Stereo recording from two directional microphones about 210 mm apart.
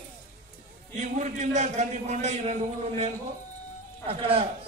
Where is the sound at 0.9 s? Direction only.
35° right (ahead or behind).